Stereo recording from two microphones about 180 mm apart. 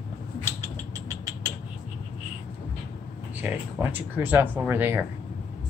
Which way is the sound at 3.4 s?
10° right (ahead or behind).